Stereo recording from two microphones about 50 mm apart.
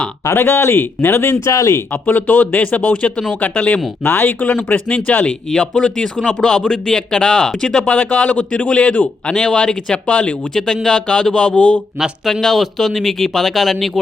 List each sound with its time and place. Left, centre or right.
0.3 s speech: left
1.5 s speech: left
1.9 s a man's voice: left
5.5 s speech: centre
7.9 s a man's voice: left
12.3 s speech: centre